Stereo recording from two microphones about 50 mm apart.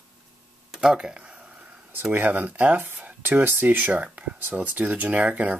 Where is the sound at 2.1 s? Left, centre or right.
Right.